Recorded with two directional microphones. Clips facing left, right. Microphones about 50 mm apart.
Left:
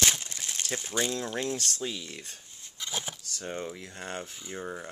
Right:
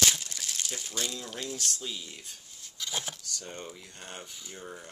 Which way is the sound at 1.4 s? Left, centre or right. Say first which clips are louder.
Left 4 dB; left.